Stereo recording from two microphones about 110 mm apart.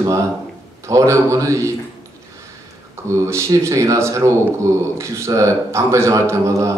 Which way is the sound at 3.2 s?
25° right (ahead or behind).